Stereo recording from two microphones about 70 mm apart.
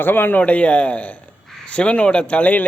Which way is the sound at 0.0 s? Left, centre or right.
Left.